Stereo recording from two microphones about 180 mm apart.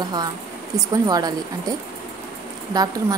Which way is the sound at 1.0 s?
20° right (ahead or behind).